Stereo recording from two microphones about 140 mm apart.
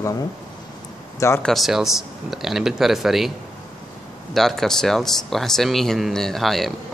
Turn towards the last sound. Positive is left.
turn(degrees=0)  # may be behind; listen again after turning